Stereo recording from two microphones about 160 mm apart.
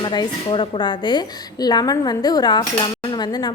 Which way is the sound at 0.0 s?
30° left (ahead or behind).